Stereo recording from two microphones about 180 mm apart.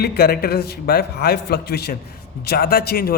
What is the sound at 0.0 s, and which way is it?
A man's voice, 60° left (ahead or behind).